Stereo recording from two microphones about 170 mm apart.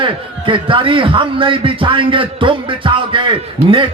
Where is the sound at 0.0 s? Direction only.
30° right (ahead or behind).